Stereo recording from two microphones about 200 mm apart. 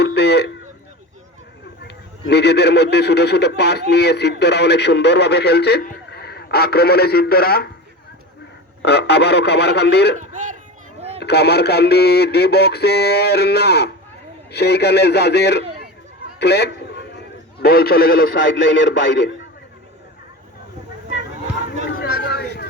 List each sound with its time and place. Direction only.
0.0 s a sound: 55° left (ahead or behind)
1.8 s a man's voice: 55° left (ahead or behind)
8.8 s a man's voice: 55° left (ahead or behind)
10.2 s speech: 40° right (ahead or behind)
11.2 s a man's voice: 55° left (ahead or behind)
16.4 s a sound: 55° left (ahead or behind)
17.6 s a man's voice: 50° left (ahead or behind)
21.8 s chatter: 50° left (ahead or behind)